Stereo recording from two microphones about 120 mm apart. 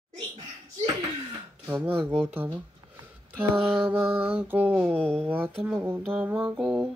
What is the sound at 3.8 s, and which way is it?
Mantra, 15° right (ahead or behind).